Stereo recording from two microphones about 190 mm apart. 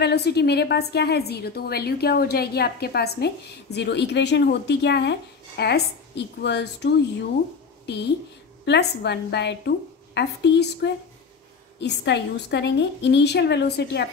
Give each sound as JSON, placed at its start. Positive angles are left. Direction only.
{"t": 0.0, "sound": "a woman's voice", "side_deg": 60}